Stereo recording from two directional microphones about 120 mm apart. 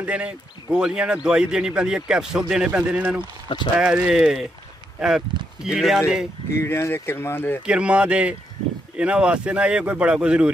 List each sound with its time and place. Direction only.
0.0 s speech: 10° right (ahead or behind)
6.5 s speech: 20° left (ahead or behind)
7.6 s speech: 10° right (ahead or behind)